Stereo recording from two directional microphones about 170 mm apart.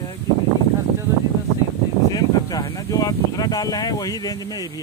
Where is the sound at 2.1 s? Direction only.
20° left (ahead or behind).